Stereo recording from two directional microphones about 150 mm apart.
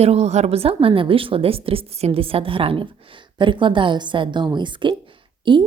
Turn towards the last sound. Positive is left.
turn(degrees=-35)  # may be behind; listen again after turning